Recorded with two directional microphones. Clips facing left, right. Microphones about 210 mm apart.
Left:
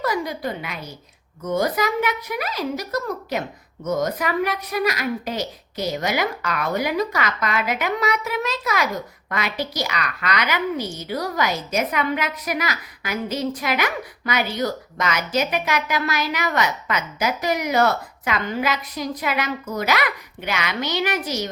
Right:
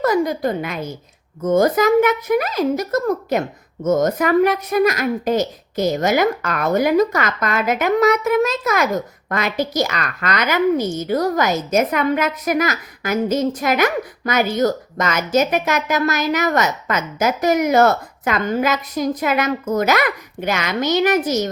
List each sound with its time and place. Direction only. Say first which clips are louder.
0.0 s a woman's voice: right 7 dB; 45° right (ahead or behind)